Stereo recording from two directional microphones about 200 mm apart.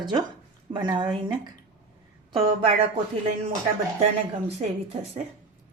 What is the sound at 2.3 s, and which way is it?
Speech, 25° right (ahead or behind).